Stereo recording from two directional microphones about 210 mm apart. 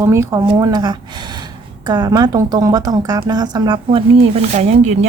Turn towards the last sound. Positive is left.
turn(degrees=-35)  # may be behind; listen again after turning